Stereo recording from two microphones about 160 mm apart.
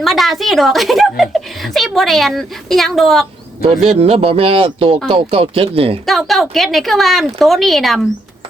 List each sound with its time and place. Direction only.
0.0 s a woman's voice: centre (ahead or behind)
3.8 s speech: 40° right (ahead or behind)
6.1 s a woman's voice: centre (ahead or behind)